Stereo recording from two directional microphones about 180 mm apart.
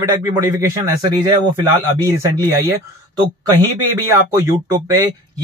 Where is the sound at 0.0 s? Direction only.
15° right (ahead or behind).